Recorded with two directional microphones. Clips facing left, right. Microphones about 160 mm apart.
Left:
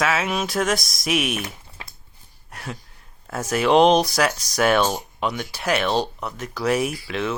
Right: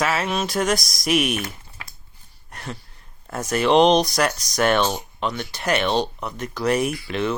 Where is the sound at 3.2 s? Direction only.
5° left (ahead or behind).